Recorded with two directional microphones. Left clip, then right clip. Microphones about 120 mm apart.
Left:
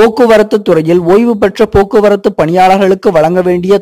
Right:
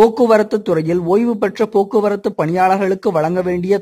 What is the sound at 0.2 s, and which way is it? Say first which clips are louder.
A man's voice: left 6 dB; 40° left (ahead or behind).